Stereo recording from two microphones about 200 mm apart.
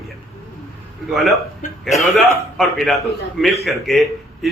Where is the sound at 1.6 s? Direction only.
40° left (ahead or behind).